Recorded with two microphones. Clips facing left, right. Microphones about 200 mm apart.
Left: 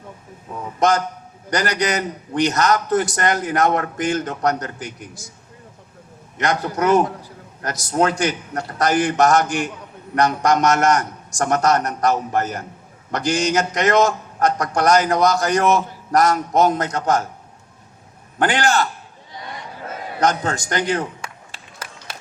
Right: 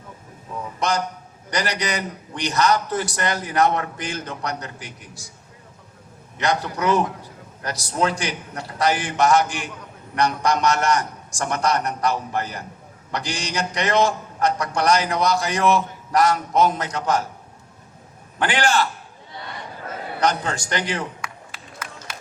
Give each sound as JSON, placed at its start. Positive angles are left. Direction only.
{"t": 1.5, "sound": "a man's voice", "side_deg": 45}
{"t": 6.3, "sound": "a man's voice", "side_deg": 50}
{"t": 18.4, "sound": "a man's voice", "side_deg": 45}
{"t": 20.1, "sound": "a man's voice", "side_deg": 45}
{"t": 21.2, "sound": "a sound", "side_deg": 30}